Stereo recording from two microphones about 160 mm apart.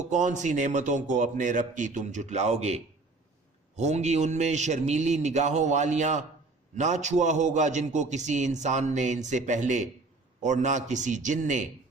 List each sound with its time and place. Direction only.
0.1 s a man's voice: 50° right (ahead or behind)